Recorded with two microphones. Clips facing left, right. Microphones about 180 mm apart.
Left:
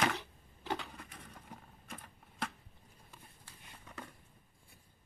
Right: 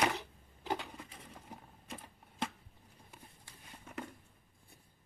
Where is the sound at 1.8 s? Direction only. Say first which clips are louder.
Right 3 dB; 25° right (ahead or behind).